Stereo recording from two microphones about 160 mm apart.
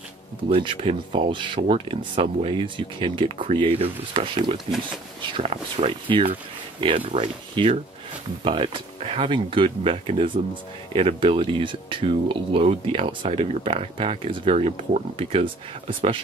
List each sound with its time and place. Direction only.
0.5 s speech: 35° right (ahead or behind)